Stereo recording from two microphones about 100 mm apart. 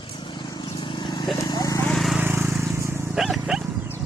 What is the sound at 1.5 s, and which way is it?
Horse, 40° left (ahead or behind).